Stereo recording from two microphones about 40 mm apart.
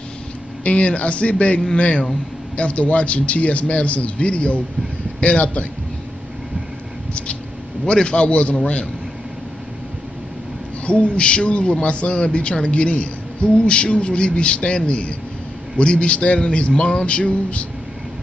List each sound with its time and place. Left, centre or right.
0.7 s a man's voice: left
7.8 s a man's voice: left
10.9 s a man's voice: left